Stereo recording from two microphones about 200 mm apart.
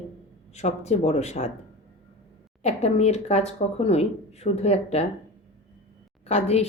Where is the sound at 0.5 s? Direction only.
35° left (ahead or behind).